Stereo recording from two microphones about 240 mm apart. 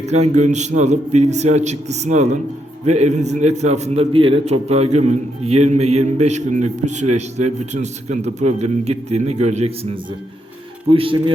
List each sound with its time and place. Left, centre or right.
0.0 s a man's voice: right